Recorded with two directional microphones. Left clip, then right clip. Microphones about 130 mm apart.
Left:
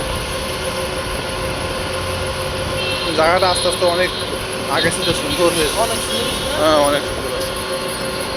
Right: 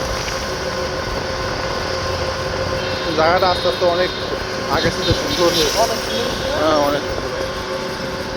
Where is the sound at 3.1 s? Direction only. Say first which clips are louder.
Even; 15° right (ahead or behind).